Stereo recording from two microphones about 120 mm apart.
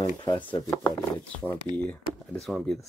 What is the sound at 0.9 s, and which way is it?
Speech, 20° left (ahead or behind).